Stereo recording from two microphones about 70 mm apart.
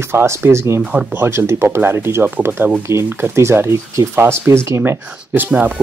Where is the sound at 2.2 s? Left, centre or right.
Right.